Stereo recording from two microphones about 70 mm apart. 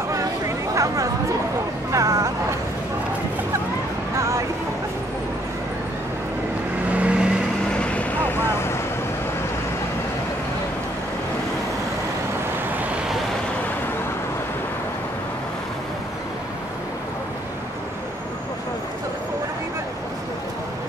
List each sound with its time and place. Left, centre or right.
0.7 s a sound: right
1.9 s vehicle: right
6.9 s vehicle: centre
7.8 s vehicle: centre
8.3 s vehicle: left